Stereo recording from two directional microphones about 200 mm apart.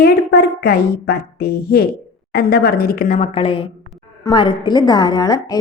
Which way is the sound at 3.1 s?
30° left (ahead or behind).